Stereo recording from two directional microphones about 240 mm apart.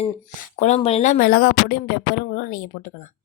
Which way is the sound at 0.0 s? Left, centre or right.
Left.